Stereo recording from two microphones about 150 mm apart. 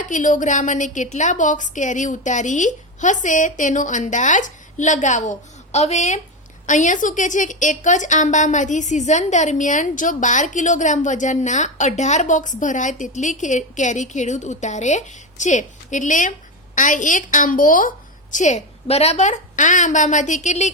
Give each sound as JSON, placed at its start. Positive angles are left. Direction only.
{"t": 0.1, "sound": "a woman's voice", "side_deg": 60}